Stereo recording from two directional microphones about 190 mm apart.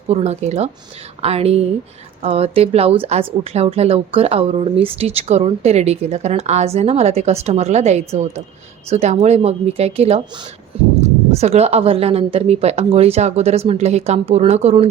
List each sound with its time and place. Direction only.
0.1 s a woman's voice: 35° right (ahead or behind)